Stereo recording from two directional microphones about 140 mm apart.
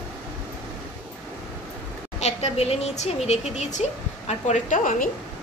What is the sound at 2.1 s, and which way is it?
A woman's voice, 50° left (ahead or behind).